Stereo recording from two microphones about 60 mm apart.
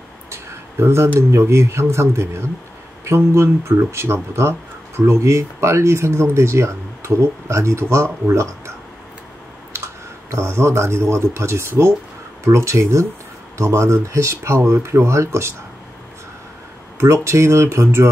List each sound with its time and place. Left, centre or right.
0.3 s a sound: right
1.3 s speech: right
10.3 s speech: right
17.0 s speech: right